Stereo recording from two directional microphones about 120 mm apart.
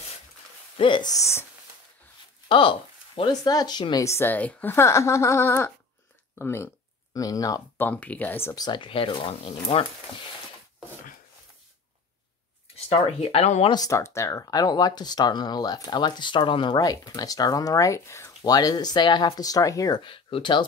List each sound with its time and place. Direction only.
0.7 s speech: 45° left (ahead or behind)
1.1 s speech: 25° left (ahead or behind)
2.4 s a sound: 45° left (ahead or behind)
3.2 s speech: 35° left (ahead or behind)
4.0 s speech: 20° left (ahead or behind)
7.8 s speech: 10° left (ahead or behind)
8.5 s speech: 40° left (ahead or behind)
12.9 s speech: 60° left (ahead or behind)
13.7 s speech: 30° left (ahead or behind)
20.0 s speech: 45° left (ahead or behind)